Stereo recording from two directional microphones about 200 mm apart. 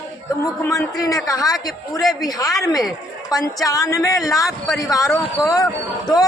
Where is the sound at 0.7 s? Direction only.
15° left (ahead or behind).